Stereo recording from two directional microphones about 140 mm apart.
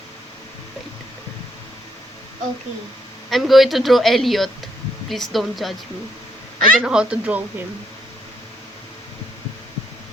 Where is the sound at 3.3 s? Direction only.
Centre (ahead or behind).